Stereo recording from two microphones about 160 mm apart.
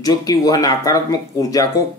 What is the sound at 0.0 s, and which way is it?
Speech, 25° left (ahead or behind).